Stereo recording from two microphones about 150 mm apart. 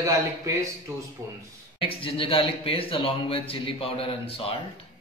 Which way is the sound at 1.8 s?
35° left (ahead or behind).